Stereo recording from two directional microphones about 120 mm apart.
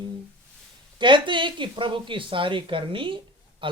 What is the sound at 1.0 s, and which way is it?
Speech, 40° right (ahead or behind).